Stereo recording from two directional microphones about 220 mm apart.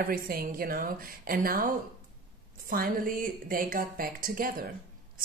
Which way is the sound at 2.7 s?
40° right (ahead or behind).